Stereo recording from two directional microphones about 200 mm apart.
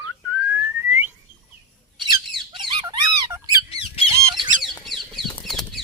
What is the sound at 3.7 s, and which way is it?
Squawk, 30° left (ahead or behind).